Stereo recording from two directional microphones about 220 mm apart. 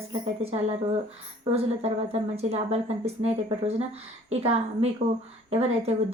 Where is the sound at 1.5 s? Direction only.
30° right (ahead or behind).